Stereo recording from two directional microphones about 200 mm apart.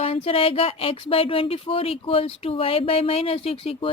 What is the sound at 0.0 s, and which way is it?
Speech, 30° left (ahead or behind).